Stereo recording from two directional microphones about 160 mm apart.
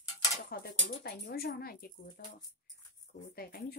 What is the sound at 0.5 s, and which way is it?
Speech, 80° left.